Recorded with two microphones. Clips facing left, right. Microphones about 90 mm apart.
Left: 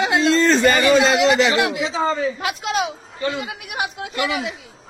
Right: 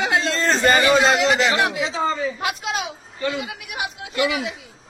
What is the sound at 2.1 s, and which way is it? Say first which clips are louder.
Speech: left 2 dB; 60° left (ahead or behind).